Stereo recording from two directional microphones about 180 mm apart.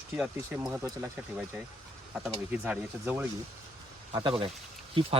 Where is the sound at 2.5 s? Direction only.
5° right (ahead or behind).